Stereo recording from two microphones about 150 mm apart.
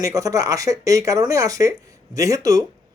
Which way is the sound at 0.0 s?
20° right (ahead or behind).